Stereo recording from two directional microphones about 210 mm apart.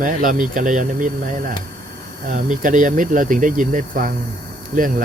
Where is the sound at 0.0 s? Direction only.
40° right (ahead or behind).